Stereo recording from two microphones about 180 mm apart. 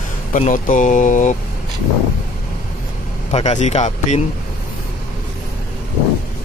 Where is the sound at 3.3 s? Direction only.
40° left (ahead or behind).